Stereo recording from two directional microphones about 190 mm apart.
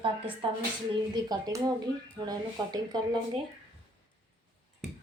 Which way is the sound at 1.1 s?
20° right (ahead or behind).